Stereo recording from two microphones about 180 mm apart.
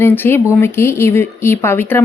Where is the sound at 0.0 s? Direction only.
10° left (ahead or behind).